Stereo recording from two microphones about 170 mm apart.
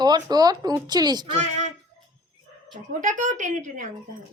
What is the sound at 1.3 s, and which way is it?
Speech, 45° right (ahead or behind).